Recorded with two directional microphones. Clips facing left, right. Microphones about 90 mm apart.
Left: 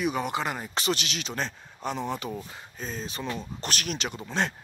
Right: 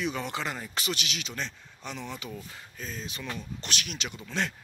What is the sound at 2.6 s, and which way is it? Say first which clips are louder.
Speech: left 4 dB; 30° left (ahead or behind).